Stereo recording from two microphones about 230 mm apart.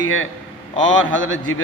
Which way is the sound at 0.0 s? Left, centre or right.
Left.